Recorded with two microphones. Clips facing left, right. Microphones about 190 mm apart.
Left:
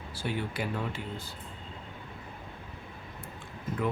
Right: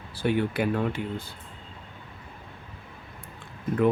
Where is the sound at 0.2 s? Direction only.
60° right (ahead or behind).